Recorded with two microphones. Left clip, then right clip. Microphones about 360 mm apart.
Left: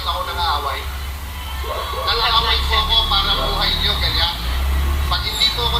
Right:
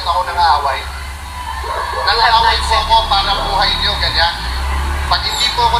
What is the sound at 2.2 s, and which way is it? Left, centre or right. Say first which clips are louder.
Music: right 6 dB; centre.